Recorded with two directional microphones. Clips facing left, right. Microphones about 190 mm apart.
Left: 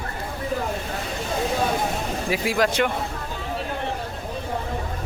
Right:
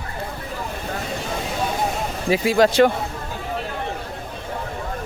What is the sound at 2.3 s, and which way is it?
Speech, 25° right (ahead or behind).